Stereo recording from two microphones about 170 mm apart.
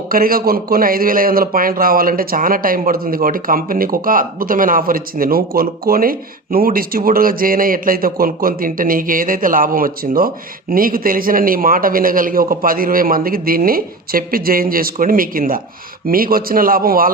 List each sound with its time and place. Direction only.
0.1 s a man's voice: 60° right (ahead or behind)